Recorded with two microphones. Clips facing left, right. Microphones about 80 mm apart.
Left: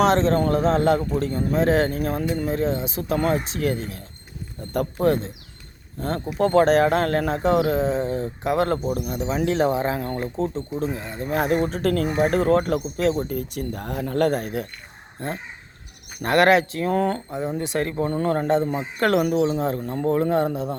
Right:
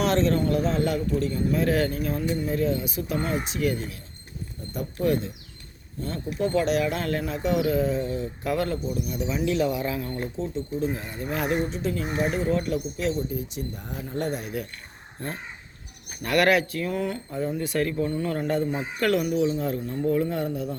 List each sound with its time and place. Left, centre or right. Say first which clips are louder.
0.0 s speech: left 4 dB; left
1.5 s speech: left 6 dB; left
2.0 s speech: left 3 dB; left
2.5 s speech: left 2 dB; left
4.7 s speech: left 7 dB; left
5.0 s speech: left 3 dB; left
6.0 s speech: left 5 dB; left
8.6 s speech: left 5 dB; left
9.1 s speech: left 3 dB; left
11.6 s speech: left 6 dB; left
16.2 s speech: left 4 dB; left
16.9 s speech: left 9 dB; left
17.6 s speech: left 1 dB; left
19.4 s speech: left 3 dB; left